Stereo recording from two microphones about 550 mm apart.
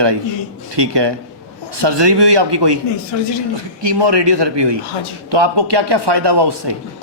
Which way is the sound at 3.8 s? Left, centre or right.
Right.